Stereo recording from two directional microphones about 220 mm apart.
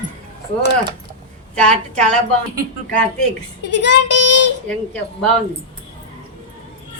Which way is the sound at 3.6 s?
50° left (ahead or behind).